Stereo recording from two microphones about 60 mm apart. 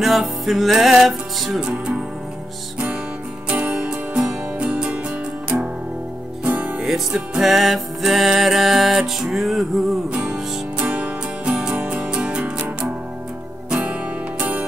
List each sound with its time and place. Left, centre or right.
0.0 s music: centre
1.6 s speech: centre
3.4 s music: right
6.8 s music: centre
10.1 s music: centre